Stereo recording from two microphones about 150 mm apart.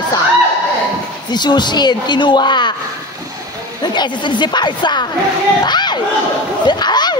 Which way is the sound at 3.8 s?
30° left (ahead or behind).